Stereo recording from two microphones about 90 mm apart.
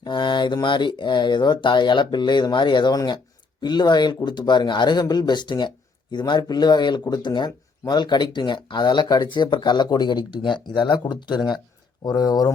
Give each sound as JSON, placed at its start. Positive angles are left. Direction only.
{"t": 0.0, "sound": "speech", "side_deg": 60}